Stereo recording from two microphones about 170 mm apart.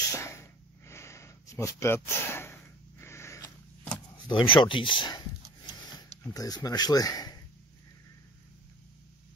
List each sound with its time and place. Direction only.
0.1 s a sound: 15° left (ahead or behind)
4.3 s speech: 30° left (ahead or behind)
6.3 s speech: 20° left (ahead or behind)